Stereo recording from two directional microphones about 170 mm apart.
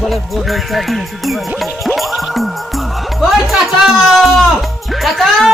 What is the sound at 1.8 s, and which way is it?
Music, centre (ahead or behind).